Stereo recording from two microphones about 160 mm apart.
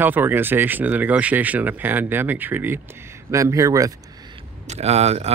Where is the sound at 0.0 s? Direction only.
10° right (ahead or behind).